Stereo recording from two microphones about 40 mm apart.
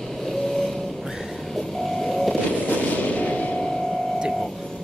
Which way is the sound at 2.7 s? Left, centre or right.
Left.